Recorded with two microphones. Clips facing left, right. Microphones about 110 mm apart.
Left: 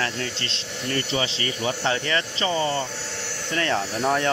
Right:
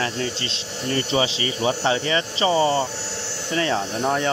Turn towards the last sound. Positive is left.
turn(degrees=0)  # may be behind; listen again after turning